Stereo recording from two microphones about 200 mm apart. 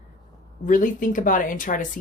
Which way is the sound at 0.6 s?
40° left (ahead or behind).